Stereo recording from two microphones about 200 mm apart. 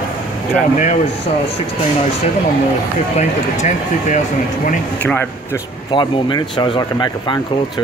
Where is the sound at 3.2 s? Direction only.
35° left (ahead or behind).